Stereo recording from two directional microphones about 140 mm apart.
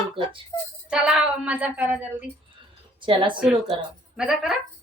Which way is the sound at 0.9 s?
5° right (ahead or behind).